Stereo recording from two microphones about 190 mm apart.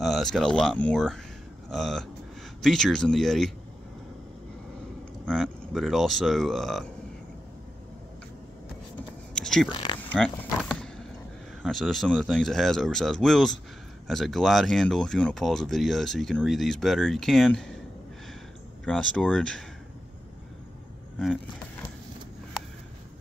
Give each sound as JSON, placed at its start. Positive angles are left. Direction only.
{"t": 0.0, "sound": "speech", "side_deg": 0}
{"t": 5.2, "sound": "speech", "side_deg": 0}
{"t": 9.3, "sound": "a sound", "side_deg": 5}
{"t": 9.7, "sound": "speech", "side_deg": 25}
{"t": 10.1, "sound": "vehicle", "side_deg": 0}
{"t": 11.6, "sound": "speech", "side_deg": 0}
{"t": 18.9, "sound": "speech", "side_deg": 5}
{"t": 21.2, "sound": "vehicle", "side_deg": 5}